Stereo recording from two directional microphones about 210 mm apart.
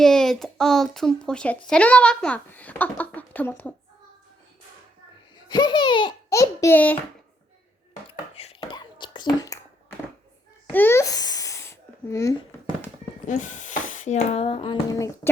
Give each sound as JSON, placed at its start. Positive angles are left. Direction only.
{"t": 0.0, "sound": "speech", "side_deg": 0}
{"t": 5.5, "sound": "speech", "side_deg": 20}
{"t": 8.4, "sound": "whispering", "side_deg": 25}
{"t": 10.7, "sound": "a sound", "side_deg": 10}
{"t": 13.2, "sound": "speech", "side_deg": 35}